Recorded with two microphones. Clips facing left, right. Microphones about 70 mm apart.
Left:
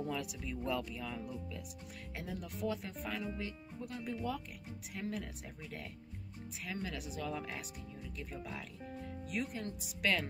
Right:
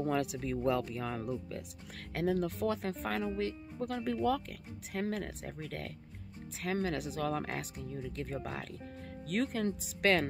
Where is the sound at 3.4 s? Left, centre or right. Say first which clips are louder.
Right 8 dB; right.